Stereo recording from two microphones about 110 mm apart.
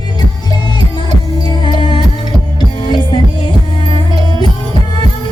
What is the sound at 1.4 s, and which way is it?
Music, 45° left (ahead or behind).